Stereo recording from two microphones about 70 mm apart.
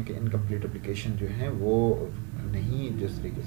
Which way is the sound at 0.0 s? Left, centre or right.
Centre.